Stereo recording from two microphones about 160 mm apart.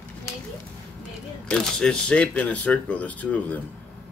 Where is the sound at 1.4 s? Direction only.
5° left (ahead or behind).